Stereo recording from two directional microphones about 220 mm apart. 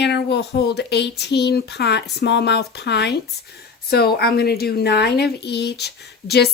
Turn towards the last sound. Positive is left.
turn(degrees=50)  # may be behind; listen again after turning